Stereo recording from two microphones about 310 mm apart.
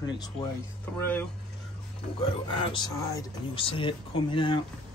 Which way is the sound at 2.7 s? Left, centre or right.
Centre.